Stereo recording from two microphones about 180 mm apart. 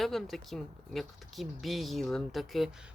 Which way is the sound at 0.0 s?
Centre (ahead or behind).